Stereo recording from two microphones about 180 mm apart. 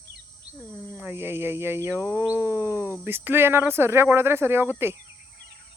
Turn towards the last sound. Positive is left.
turn(degrees=-15)  # may be behind; listen again after turning